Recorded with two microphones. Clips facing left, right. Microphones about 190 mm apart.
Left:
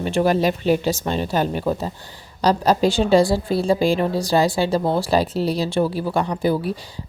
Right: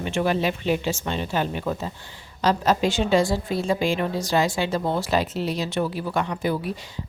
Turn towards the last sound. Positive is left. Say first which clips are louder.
# left 5 dB
turn(degrees=35)  # may be behind; listen again after turning